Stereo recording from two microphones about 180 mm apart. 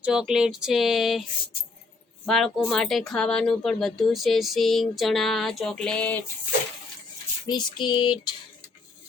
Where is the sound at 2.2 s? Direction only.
Centre (ahead or behind).